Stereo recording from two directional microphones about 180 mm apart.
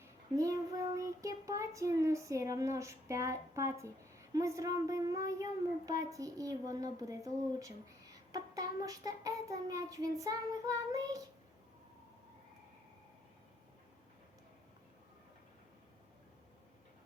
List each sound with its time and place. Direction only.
0.0 s child singing: 20° right (ahead or behind)